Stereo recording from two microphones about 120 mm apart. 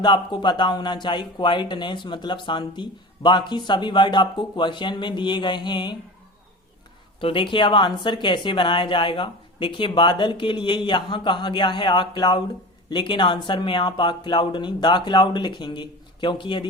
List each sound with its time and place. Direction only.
0.0 s speech: 40° left (ahead or behind)
7.2 s speech: 45° left (ahead or behind)